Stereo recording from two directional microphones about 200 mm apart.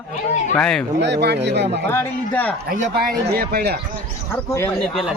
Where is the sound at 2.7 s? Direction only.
45° right (ahead or behind).